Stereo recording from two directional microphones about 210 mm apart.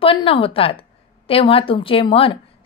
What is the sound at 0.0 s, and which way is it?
A woman's voice, 25° left (ahead or behind).